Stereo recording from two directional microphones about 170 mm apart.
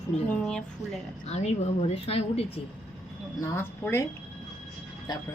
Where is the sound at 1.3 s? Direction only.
40° left (ahead or behind).